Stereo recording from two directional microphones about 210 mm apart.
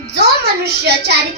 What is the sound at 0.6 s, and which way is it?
Speech, 50° right (ahead or behind).